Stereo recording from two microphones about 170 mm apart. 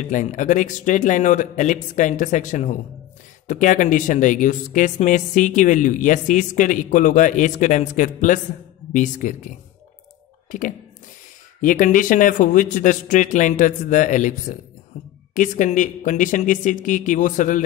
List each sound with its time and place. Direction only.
0.0 s speech: 45° left (ahead or behind)
11.6 s speech: 50° left (ahead or behind)